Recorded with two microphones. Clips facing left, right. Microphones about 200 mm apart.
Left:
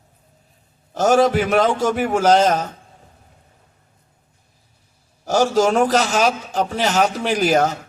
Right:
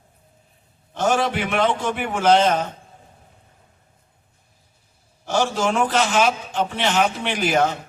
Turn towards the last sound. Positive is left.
turn(degrees=40)  # may be behind; listen again after turning